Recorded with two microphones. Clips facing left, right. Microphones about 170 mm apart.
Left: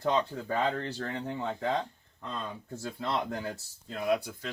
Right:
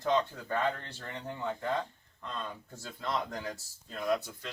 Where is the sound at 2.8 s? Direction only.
65° left (ahead or behind).